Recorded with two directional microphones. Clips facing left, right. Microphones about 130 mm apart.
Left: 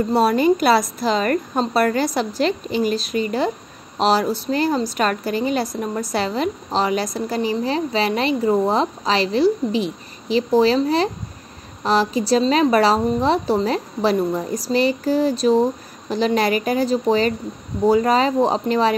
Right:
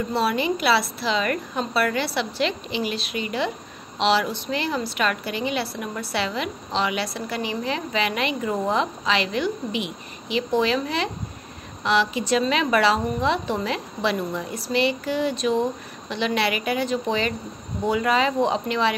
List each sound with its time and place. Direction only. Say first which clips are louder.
0.1 s a woman's voice: left 8 dB; 45° left (ahead or behind)